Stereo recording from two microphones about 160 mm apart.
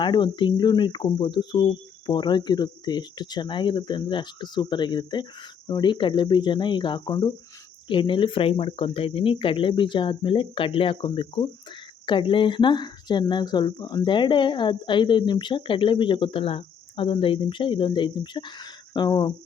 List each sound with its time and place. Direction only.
0.0 s speech: 30° left (ahead or behind)